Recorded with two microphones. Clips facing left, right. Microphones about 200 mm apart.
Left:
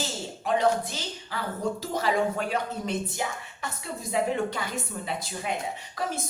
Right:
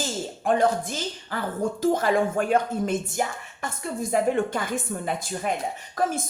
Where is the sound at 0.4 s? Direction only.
50° right (ahead or behind).